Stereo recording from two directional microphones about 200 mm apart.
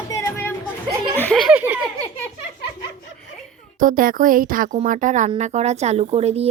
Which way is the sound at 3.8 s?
45° right (ahead or behind).